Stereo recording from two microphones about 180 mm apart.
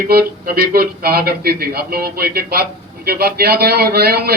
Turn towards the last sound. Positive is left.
turn(degrees=-60)  # may be behind; listen again after turning